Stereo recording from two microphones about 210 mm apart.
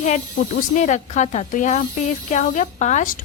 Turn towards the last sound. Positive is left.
turn(degrees=40)  # may be behind; listen again after turning